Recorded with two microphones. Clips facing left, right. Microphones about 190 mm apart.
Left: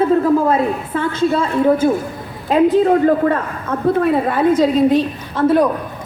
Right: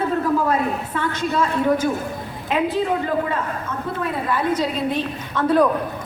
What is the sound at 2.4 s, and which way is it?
A man's voice, 40° left (ahead or behind).